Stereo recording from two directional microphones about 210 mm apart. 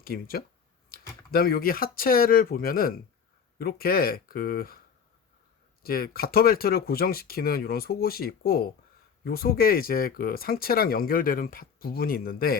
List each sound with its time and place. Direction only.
0.0 s speech: 45° left (ahead or behind)
0.9 s computer keyboard: 45° left (ahead or behind)
1.3 s speech: 45° left (ahead or behind)
5.8 s speech: 45° left (ahead or behind)